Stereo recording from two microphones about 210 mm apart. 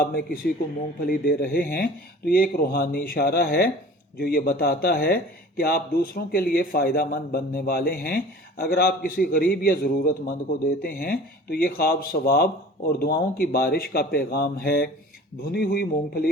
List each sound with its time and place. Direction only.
0.0 s speech: 45° left (ahead or behind)